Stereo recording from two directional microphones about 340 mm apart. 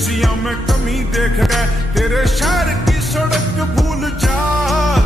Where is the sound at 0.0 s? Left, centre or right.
Centre.